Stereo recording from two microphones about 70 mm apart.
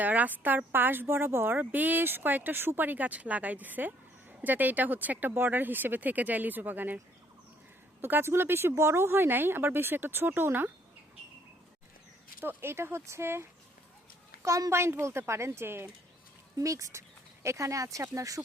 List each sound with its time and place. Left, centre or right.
0.0 s speech: right
8.0 s speech: right
12.4 s speech: right
14.4 s speech: right
16.6 s speech: right